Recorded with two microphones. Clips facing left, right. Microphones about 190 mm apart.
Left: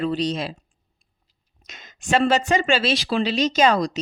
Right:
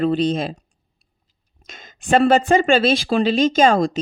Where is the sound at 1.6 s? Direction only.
50° right (ahead or behind).